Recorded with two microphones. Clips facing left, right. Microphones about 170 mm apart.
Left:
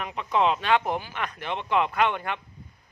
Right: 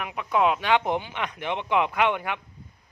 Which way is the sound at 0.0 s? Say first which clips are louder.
Right 1 dB; 10° right (ahead or behind).